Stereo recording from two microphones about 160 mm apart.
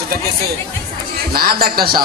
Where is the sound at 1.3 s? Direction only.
70° right (ahead or behind).